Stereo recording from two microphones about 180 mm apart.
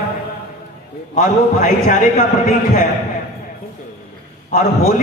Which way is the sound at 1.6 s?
45° left (ahead or behind).